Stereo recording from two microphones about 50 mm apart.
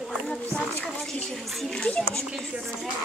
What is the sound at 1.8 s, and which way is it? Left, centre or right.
Speech, centre.